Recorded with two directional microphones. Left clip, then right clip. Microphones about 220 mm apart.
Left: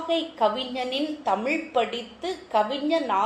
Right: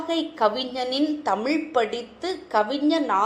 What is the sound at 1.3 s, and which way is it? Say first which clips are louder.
A woman's voice: right 1 dB; 25° right (ahead or behind).